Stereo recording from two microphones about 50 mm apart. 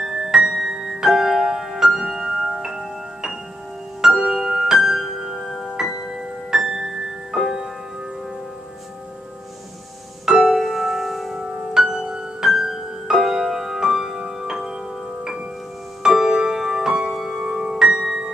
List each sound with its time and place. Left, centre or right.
0.0 s music: centre
6.5 s music: centre
10.2 s music: centre
11.4 s music: centre
16.0 s music: centre